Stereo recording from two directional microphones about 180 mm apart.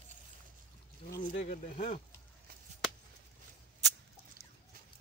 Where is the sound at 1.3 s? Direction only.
40° left (ahead or behind).